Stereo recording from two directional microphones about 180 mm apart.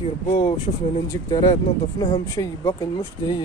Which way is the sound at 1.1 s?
20° left (ahead or behind).